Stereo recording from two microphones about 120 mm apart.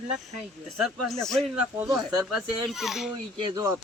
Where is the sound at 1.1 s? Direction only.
5° left (ahead or behind).